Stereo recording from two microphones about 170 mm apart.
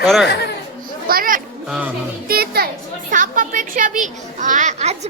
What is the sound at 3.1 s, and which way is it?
A woman's voice, 50° right (ahead or behind).